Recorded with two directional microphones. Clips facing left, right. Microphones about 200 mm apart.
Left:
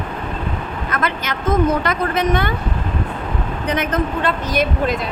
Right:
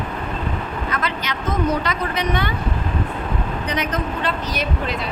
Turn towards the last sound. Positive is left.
turn(degrees=50)  # may be behind; listen again after turning